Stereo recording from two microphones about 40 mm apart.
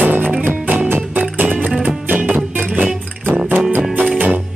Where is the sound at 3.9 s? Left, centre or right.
Right.